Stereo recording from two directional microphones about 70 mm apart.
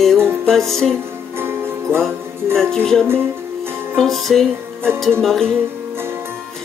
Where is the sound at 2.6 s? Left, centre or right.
Centre.